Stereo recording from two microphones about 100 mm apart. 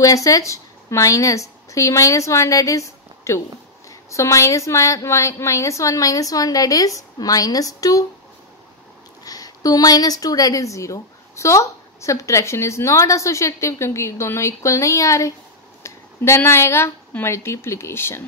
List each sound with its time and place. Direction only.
0.0 s a woman's voice: 35° left (ahead or behind)
9.2 s a woman's voice: 40° left (ahead or behind)